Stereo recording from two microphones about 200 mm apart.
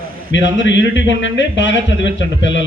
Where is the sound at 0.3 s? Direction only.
65° left (ahead or behind).